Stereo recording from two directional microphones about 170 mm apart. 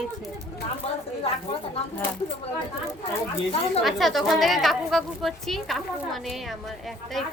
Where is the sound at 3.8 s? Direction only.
Centre (ahead or behind).